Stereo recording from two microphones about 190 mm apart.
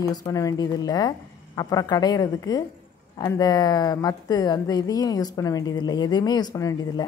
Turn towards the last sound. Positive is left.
turn(degrees=20)  # may be behind; listen again after turning